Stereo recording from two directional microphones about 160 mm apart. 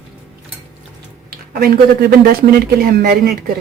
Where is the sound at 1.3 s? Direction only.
70° right (ahead or behind).